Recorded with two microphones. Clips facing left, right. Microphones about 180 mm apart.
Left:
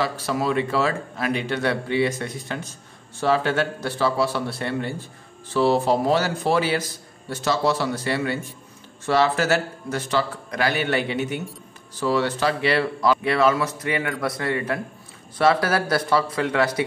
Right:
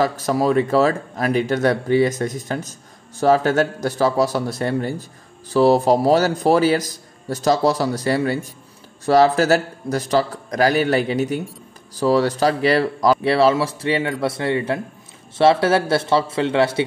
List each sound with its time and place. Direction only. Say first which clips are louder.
0.0 s a man's voice: right 5 dB; 45° right (ahead or behind); by 16.8 s 25° right (ahead or behind)